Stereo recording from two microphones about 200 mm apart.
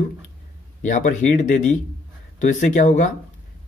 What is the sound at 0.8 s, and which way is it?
A man's voice, 40° left (ahead or behind).